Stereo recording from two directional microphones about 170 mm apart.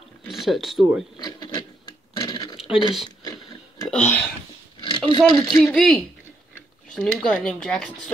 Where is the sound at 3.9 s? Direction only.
10° left (ahead or behind).